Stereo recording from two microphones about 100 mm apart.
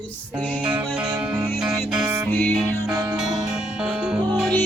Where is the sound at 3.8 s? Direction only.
5° right (ahead or behind).